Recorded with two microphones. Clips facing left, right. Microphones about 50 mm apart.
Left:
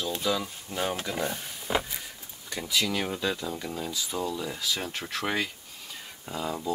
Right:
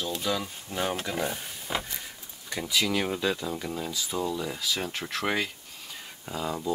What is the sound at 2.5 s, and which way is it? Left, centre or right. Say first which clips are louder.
Speech: right 1 dB; centre.